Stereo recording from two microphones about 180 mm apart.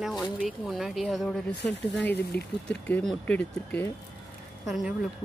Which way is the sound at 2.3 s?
60° left (ahead or behind).